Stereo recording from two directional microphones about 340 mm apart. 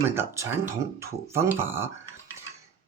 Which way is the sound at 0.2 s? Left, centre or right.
Centre.